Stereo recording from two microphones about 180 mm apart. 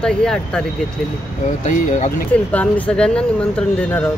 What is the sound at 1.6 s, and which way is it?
Speech, 40° left (ahead or behind).